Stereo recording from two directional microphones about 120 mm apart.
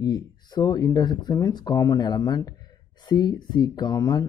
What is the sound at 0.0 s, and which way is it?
Speech, 35° left (ahead or behind).